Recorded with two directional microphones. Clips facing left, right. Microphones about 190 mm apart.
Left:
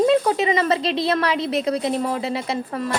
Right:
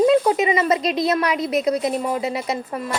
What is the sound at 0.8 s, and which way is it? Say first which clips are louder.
A woman's voice: right 1 dB; 30° left (ahead or behind).